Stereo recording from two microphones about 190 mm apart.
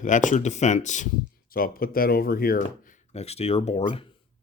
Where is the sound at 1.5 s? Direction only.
50° left (ahead or behind); by 4.1 s 30° left (ahead or behind).